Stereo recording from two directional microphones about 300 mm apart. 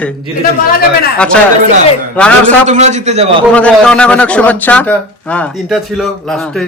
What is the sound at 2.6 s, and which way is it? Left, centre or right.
Speech, right.